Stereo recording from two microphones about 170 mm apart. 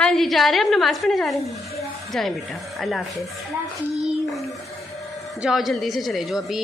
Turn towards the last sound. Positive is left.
turn(degrees=0)  # may be behind; listen again after turning